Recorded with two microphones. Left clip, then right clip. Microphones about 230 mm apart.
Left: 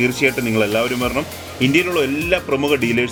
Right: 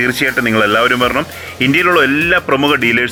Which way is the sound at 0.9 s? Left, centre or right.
Right.